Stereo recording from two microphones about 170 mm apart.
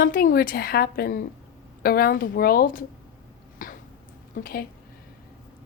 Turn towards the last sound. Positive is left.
turn(degrees=60)  # may be behind; listen again after turning